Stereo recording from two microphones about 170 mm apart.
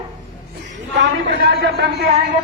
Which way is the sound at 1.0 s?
90° right.